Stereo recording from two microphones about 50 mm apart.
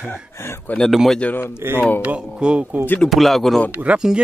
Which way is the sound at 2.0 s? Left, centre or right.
Right.